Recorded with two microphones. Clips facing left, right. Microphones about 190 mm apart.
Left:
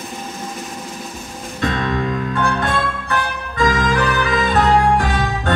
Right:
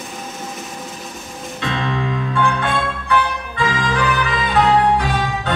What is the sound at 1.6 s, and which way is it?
Music, 45° left (ahead or behind).